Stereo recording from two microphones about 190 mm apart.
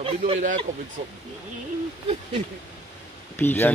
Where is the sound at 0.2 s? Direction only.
40° right (ahead or behind).